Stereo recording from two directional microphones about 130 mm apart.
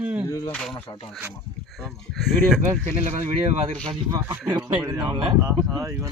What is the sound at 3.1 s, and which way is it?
Speech, 65° right (ahead or behind).